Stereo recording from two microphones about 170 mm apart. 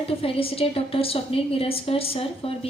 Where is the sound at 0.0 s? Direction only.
35° left (ahead or behind).